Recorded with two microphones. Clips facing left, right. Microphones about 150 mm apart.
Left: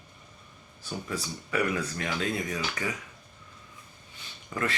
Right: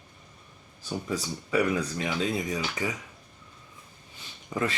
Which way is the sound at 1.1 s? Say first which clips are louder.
Right 4 dB; 15° right (ahead or behind).